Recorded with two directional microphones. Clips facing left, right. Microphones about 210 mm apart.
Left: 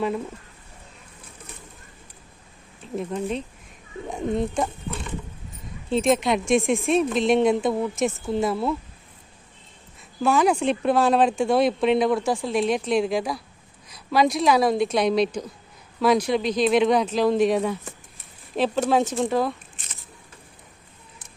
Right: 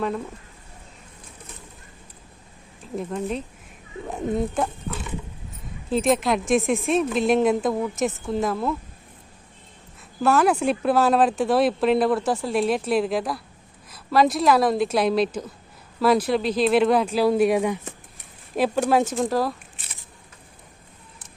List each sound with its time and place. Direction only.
2.8 s a woman's voice: centre (ahead or behind)
10.2 s a woman's voice: 5° right (ahead or behind)